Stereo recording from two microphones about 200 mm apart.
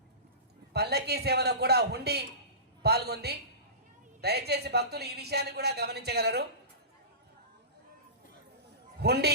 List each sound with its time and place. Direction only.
0.7 s a woman's voice: 55° right (ahead or behind)
9.0 s a man's voice: 55° right (ahead or behind)